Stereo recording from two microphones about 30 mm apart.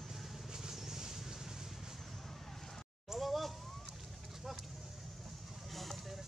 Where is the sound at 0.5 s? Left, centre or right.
Centre.